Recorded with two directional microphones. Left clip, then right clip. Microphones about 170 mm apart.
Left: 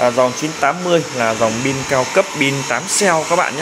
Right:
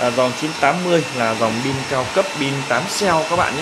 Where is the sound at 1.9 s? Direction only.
20° left (ahead or behind).